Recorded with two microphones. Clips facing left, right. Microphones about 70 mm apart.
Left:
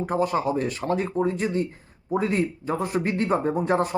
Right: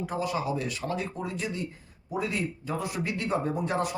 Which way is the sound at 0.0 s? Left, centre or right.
Left.